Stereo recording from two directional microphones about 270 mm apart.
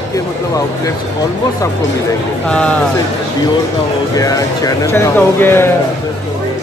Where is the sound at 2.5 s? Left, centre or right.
Centre.